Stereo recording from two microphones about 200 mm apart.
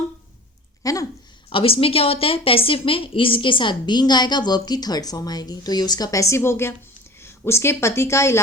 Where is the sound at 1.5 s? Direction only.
25° left (ahead or behind).